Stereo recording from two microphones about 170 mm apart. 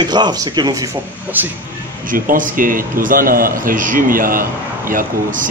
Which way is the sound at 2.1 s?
55° right (ahead or behind).